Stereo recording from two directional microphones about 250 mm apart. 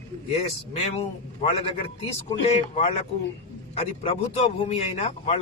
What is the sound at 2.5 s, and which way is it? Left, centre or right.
Speech, left.